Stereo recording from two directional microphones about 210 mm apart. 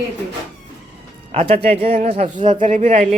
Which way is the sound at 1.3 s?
30° right (ahead or behind).